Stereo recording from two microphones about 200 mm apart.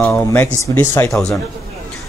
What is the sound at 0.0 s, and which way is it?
Speech, 15° left (ahead or behind).